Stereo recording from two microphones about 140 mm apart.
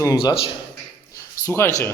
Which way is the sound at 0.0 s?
25° left (ahead or behind).